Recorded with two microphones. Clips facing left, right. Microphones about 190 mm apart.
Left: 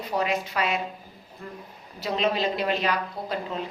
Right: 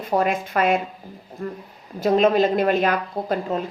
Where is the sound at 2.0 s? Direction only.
50° right (ahead or behind).